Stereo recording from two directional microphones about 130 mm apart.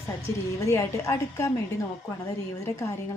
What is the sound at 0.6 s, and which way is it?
Speech, 25° left (ahead or behind).